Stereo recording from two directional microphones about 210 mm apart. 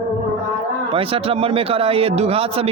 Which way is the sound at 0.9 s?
25° right (ahead or behind).